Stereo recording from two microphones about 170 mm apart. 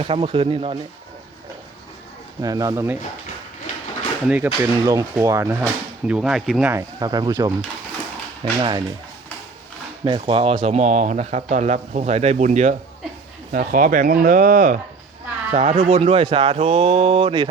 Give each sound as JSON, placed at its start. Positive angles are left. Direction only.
{"t": 0.1, "sound": "speech", "side_deg": -35}
{"t": 2.4, "sound": "speech", "side_deg": -20}
{"t": 4.3, "sound": "speech", "side_deg": -10}
{"t": 6.1, "sound": "speech", "side_deg": -5}
{"t": 6.7, "sound": "speech", "side_deg": -20}
{"t": 8.5, "sound": "speech", "side_deg": -25}
{"t": 10.0, "sound": "speech", "side_deg": -30}